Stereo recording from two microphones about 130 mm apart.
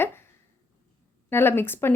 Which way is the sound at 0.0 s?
15° left (ahead or behind).